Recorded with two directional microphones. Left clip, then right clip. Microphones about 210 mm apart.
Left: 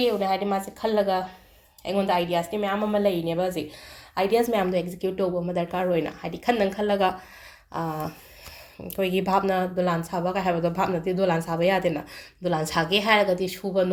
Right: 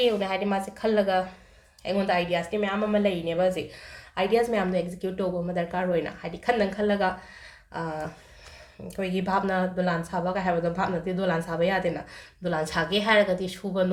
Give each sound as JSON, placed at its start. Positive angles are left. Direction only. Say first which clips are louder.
{"t": 0.0, "sound": "a woman's voice", "louder": "left 1 dB", "side_deg": 20}